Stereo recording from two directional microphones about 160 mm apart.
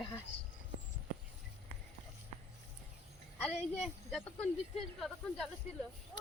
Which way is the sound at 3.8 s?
Centre (ahead or behind).